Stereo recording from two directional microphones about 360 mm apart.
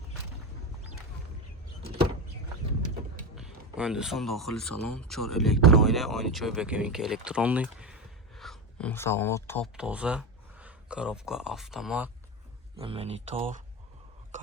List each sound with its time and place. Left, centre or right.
3.3 s speech: centre
12.8 s speech: centre